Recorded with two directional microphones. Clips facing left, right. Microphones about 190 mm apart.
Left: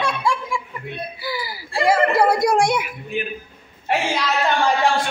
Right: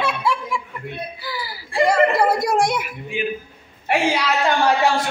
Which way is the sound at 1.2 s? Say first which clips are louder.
Left 5 dB; 15° left (ahead or behind).